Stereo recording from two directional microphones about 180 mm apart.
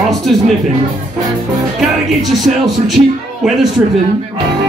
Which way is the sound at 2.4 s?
Centre (ahead or behind).